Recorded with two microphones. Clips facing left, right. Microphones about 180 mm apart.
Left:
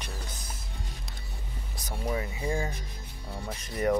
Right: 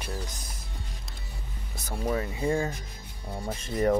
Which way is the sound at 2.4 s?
30° right (ahead or behind).